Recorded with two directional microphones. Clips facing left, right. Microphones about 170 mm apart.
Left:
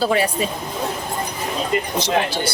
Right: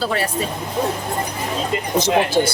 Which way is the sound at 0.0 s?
15° left (ahead or behind).